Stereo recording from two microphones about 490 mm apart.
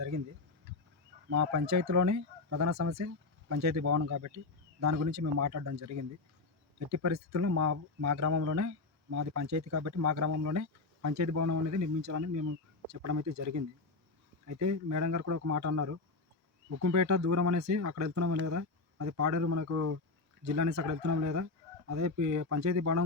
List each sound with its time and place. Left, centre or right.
1.3 s speech: right